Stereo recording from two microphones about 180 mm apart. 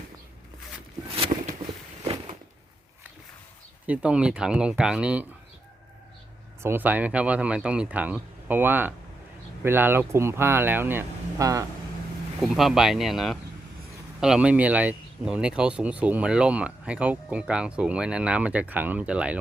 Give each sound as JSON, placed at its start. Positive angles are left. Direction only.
{"t": 1.1, "sound": "a sound", "side_deg": -30}
{"t": 3.8, "sound": "speech", "side_deg": -5}
{"t": 6.6, "sound": "speech", "side_deg": -10}
{"t": 12.4, "sound": "speech", "side_deg": 0}